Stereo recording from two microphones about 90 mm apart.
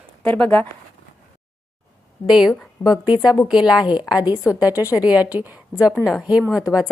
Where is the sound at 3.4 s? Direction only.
10° right (ahead or behind).